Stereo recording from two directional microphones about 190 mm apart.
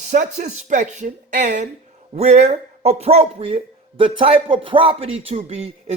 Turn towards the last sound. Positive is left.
turn(degrees=-35)  # may be behind; listen again after turning